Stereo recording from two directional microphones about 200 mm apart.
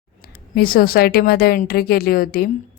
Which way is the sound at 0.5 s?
45° left (ahead or behind).